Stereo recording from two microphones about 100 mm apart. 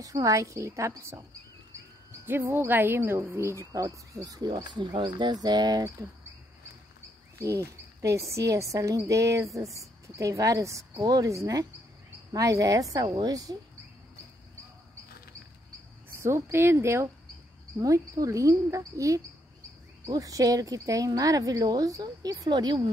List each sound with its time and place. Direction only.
0.0 s speech: 35° right (ahead or behind)
2.2 s speech: 20° right (ahead or behind); by 4.6 s 40° right (ahead or behind)
4.6 s speech: 55° right (ahead or behind)
7.3 s speech: 30° right (ahead or behind)
13.0 s speech: 45° right (ahead or behind)
16.1 s speech: 25° right (ahead or behind); by 22.8 s 45° right (ahead or behind)